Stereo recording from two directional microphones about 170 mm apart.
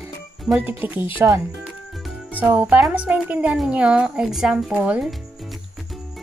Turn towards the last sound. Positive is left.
turn(degrees=-5)  # may be behind; listen again after turning